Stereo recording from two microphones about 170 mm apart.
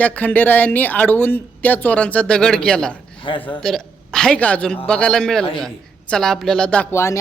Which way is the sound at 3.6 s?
5° left (ahead or behind).